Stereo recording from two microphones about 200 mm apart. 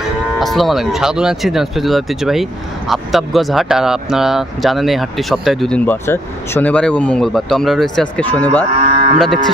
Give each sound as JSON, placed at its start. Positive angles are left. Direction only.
{"t": 0.4, "sound": "speech", "side_deg": 0}
{"t": 8.7, "sound": "cattle", "side_deg": -35}